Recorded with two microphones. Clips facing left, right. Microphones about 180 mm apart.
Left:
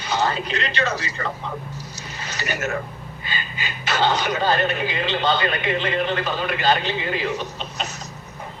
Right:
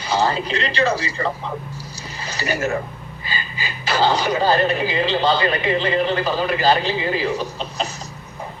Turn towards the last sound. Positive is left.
turn(degrees=-35)  # may be behind; listen again after turning